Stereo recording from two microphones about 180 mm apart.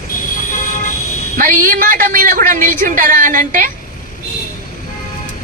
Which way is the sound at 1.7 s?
50° right (ahead or behind).